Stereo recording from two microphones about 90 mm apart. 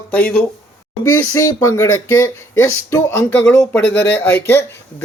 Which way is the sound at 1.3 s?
40° left (ahead or behind).